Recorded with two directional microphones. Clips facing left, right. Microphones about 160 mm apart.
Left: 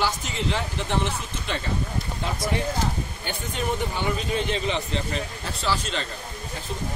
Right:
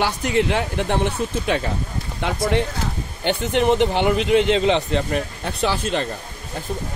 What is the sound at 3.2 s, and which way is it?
Speech, 75° right (ahead or behind).